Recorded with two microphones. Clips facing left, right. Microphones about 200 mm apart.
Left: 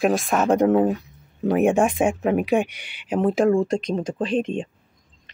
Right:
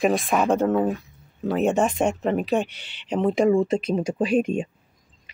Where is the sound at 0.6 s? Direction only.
15° left (ahead or behind); by 4.6 s 10° right (ahead or behind).